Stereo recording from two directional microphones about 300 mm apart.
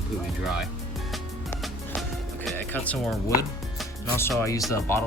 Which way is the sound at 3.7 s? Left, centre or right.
Centre.